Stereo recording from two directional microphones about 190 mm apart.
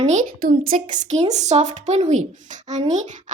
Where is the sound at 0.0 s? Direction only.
40° right (ahead or behind).